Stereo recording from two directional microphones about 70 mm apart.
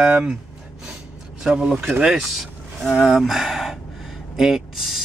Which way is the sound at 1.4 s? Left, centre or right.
Centre.